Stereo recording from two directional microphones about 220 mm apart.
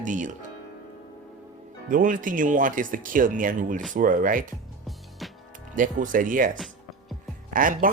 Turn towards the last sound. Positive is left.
turn(degrees=-40)  # may be behind; listen again after turning